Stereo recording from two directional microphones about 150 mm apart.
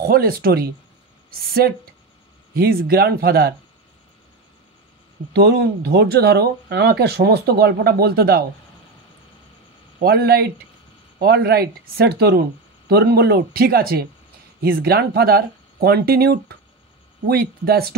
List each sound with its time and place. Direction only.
0.0 s speech: 90° right
5.3 s speech: 90° right
10.0 s speech: 90° right